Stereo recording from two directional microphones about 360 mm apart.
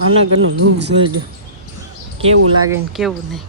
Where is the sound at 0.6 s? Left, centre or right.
Right.